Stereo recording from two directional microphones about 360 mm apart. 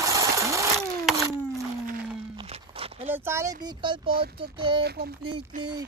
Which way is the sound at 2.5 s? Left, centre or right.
Centre.